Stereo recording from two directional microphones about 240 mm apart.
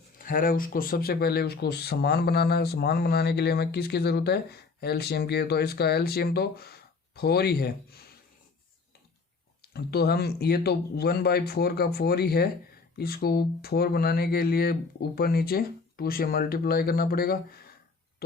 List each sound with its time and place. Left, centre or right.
0.2 s speech: left
9.6 s speech: left